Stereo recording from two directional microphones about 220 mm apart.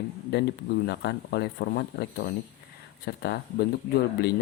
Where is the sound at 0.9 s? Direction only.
50° left (ahead or behind).